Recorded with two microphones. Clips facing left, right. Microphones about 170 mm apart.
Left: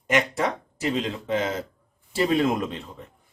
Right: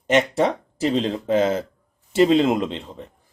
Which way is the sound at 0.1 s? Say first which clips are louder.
Right 5 dB; 30° right (ahead or behind).